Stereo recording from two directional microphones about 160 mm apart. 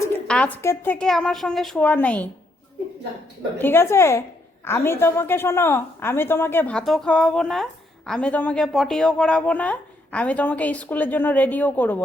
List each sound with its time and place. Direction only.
0.3 s a woman's voice: 10° left (ahead or behind)
0.9 s a woman's voice: 5° left (ahead or behind)
3.6 s a woman's voice: 15° left (ahead or behind)